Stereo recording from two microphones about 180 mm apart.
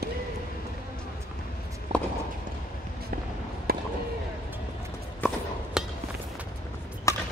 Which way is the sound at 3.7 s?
55° right (ahead or behind).